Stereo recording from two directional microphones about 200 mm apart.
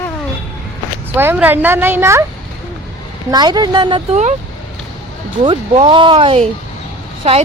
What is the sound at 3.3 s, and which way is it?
Speech, 20° right (ahead or behind).